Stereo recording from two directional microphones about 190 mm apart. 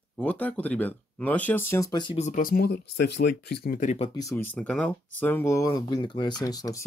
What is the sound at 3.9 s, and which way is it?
Speech, 30° left (ahead or behind).